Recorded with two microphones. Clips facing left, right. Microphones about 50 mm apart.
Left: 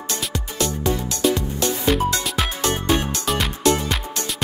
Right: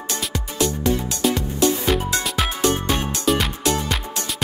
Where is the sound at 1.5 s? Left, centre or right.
Centre.